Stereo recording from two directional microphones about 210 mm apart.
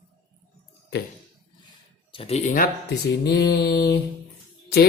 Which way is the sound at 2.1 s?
25° left (ahead or behind).